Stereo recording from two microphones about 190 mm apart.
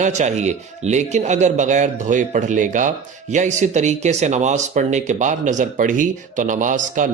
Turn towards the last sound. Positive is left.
turn(degrees=-45)  # may be behind; listen again after turning